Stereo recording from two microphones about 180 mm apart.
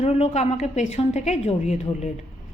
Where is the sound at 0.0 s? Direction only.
35° left (ahead or behind).